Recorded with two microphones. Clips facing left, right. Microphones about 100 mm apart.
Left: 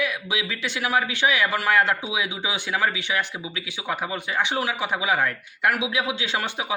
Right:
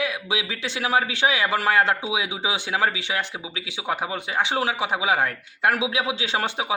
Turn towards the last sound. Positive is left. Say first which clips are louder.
# right 2 dB
turn(degrees=-25)  # may be behind; listen again after turning